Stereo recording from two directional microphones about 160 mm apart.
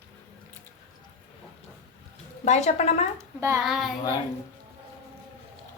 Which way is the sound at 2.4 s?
45° left (ahead or behind).